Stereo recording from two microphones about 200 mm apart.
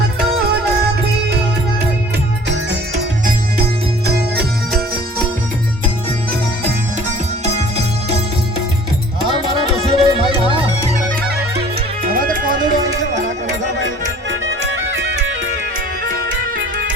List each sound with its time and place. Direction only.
2.5 s music: 60° right (ahead or behind)
9.7 s music: 25° right (ahead or behind)
12.0 s music: 45° right (ahead or behind)
14.3 s music: 65° right (ahead or behind)